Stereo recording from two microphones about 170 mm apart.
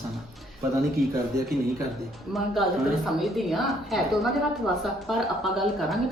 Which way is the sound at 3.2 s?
Centre (ahead or behind).